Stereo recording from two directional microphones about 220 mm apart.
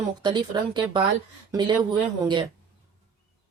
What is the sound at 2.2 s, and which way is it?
Speech, 20° right (ahead or behind).